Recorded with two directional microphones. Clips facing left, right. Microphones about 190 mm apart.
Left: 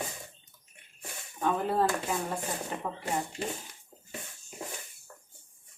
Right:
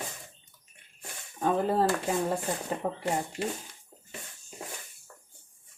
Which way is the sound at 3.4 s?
10° right (ahead or behind).